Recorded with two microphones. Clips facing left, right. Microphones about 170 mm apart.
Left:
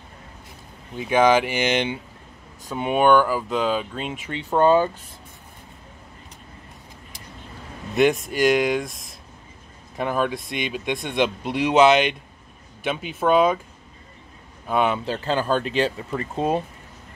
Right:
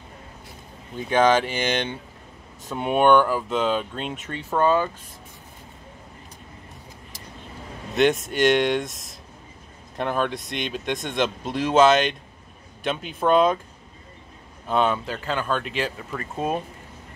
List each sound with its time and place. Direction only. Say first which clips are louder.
0.9 s speech: left 1 dB; 10° left (ahead or behind)
2.6 s speech: even; centre (ahead or behind)
4.6 s speech: left 4 dB; 30° left (ahead or behind)
7.9 s speech: left 1 dB; centre (ahead or behind)
14.7 s speech: even; 10° left (ahead or behind)
15.0 s speech: left 4 dB; 30° left (ahead or behind)